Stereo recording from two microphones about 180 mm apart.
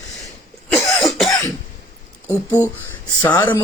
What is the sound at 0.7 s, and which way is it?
Cough, centre (ahead or behind).